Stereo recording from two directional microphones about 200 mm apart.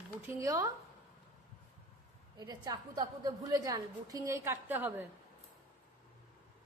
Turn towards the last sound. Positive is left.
turn(degrees=-10)  # may be behind; listen again after turning